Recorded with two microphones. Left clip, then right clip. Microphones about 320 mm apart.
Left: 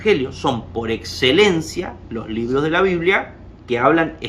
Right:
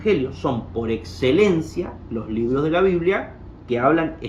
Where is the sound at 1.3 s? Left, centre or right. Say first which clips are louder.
Left 3 dB; centre.